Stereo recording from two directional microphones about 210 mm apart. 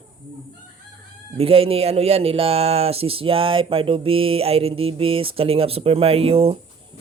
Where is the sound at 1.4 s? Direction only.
25° right (ahead or behind).